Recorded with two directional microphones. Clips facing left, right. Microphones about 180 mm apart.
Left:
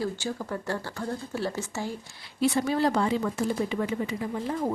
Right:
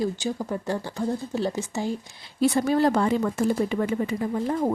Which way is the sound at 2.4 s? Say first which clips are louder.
Right 4 dB; 45° right (ahead or behind).